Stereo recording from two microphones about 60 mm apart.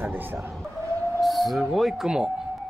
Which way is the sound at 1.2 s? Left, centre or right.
Centre.